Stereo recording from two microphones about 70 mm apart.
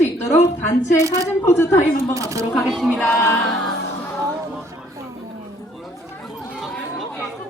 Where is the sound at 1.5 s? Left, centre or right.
Left.